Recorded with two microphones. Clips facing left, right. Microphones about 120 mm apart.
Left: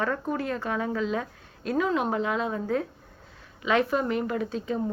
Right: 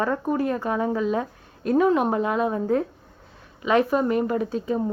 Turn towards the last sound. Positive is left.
turn(degrees=-30)  # may be behind; listen again after turning